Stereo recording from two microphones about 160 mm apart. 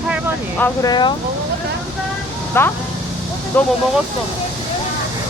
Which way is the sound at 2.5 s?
15° left (ahead or behind).